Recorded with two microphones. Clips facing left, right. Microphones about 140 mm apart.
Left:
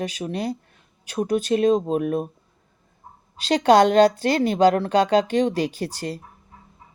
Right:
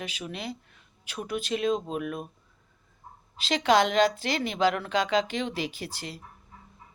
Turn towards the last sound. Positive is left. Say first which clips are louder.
# left 9 dB
turn(degrees=45)  # may be behind; listen again after turning